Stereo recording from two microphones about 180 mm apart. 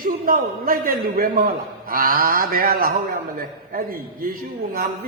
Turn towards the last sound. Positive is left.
turn(degrees=-55)  # may be behind; listen again after turning